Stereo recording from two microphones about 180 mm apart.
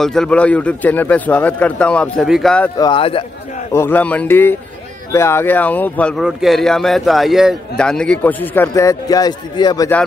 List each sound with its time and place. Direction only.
0.0 s a man's voice: 5° left (ahead or behind)
2.8 s speech: 30° left (ahead or behind)
3.7 s a man's voice: 10° left (ahead or behind)